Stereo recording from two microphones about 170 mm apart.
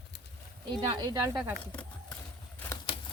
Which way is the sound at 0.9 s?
25° right (ahead or behind).